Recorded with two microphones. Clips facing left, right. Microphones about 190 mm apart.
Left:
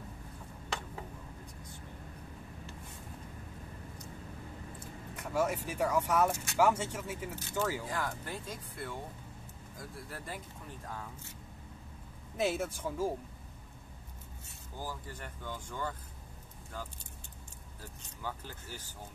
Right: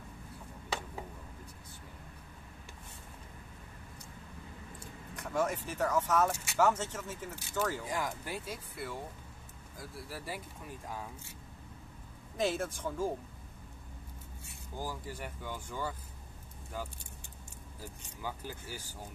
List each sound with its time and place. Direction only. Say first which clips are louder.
5.1 s speech: left 1 dB; 10° left (ahead or behind)
7.3 s speech: even; 10° right (ahead or behind)
12.4 s speech: even; 5° left (ahead or behind)
14.8 s speech: right 2 dB; 10° right (ahead or behind)
18.2 s speech: right 1 dB; 10° right (ahead or behind)